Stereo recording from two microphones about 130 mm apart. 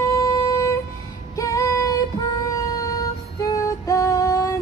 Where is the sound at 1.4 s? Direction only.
25° left (ahead or behind).